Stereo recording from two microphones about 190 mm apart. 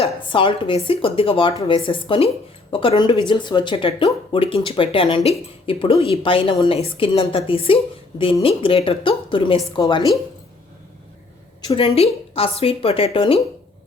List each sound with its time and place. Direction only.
0.0 s speech: 25° left (ahead or behind)
11.6 s speech: 30° left (ahead or behind)